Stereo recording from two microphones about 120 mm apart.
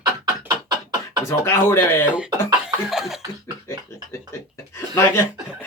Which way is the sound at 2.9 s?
5° right (ahead or behind).